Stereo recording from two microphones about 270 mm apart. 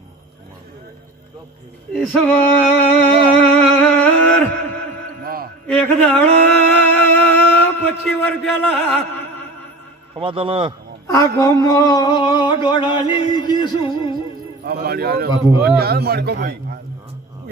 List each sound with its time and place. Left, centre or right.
2.0 s music: centre
5.2 s music: right
5.7 s speech: centre
7.0 s music: centre
7.8 s a man's voice: centre
10.1 s a man's voice: centre
11.1 s speech: centre
12.6 s music: centre
14.6 s a man's voice: right